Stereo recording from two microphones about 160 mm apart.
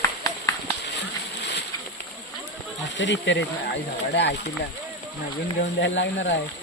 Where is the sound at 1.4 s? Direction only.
90° left.